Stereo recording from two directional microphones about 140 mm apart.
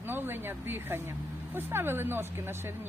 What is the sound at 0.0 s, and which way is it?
Speech, 15° right (ahead or behind).